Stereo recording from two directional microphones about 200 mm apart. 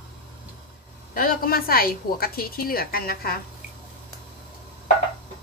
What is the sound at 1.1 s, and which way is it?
A woman's voice, 45° left (ahead or behind).